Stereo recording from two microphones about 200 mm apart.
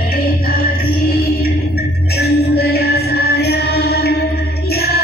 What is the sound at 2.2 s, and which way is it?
Music, 55° left (ahead or behind).